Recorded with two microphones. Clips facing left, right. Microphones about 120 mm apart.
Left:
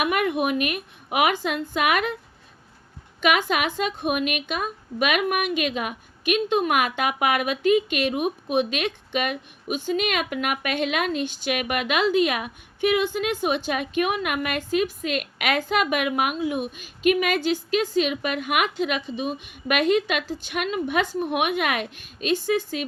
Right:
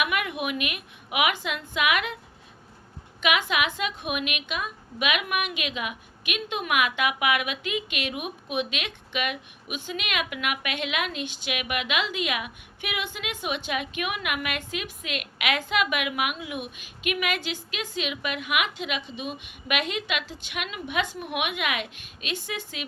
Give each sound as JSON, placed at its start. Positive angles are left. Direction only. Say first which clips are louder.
{"t": 0.0, "sound": "a woman's voice", "louder": "left 5 dB", "side_deg": 40}
{"t": 3.2, "sound": "a woman's voice", "louder": "left 3 dB", "side_deg": 40}